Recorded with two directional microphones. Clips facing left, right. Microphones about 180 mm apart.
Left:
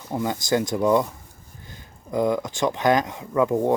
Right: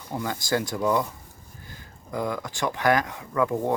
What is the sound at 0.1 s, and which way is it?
Speech, 20° left (ahead or behind).